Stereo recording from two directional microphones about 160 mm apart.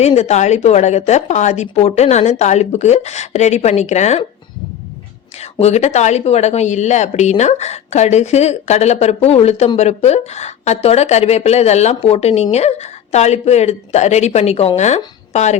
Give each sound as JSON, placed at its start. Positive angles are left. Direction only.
{"t": 0.0, "sound": "speech", "side_deg": 45}
{"t": 5.4, "sound": "speech", "side_deg": 45}